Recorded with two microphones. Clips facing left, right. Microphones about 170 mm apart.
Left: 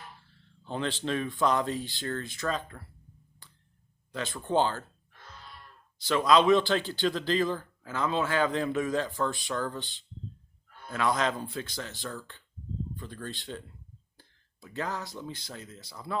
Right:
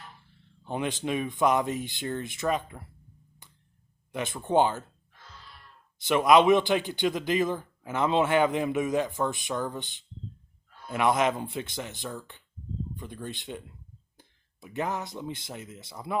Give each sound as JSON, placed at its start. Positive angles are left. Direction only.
{"t": 0.3, "sound": "a man's voice", "side_deg": -15}
{"t": 3.4, "sound": "a sound", "side_deg": -20}
{"t": 4.1, "sound": "a man's voice", "side_deg": -20}
{"t": 6.1, "sound": "a man's voice", "side_deg": -20}